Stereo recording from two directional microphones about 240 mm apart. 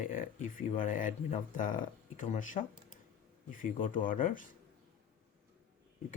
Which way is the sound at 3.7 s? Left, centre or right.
Left.